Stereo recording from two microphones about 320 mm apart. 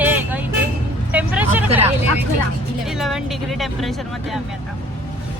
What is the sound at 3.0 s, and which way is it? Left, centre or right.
Speech, centre.